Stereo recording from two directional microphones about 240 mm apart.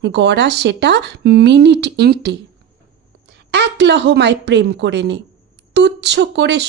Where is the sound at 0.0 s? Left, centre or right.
Right.